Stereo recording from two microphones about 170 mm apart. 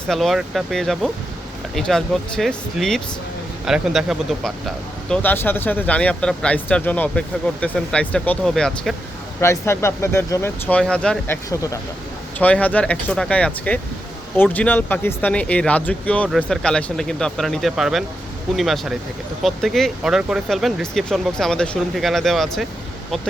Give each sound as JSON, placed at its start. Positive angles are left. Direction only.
{"t": 0.1, "sound": "speech", "side_deg": 0}
{"t": 9.4, "sound": "speech", "side_deg": 15}
{"t": 11.5, "sound": "speech", "side_deg": 20}